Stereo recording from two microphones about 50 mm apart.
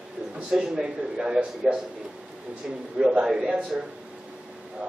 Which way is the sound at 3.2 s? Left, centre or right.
Centre.